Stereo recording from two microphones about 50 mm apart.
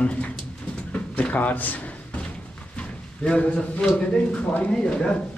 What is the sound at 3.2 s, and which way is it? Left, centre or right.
Speech, left.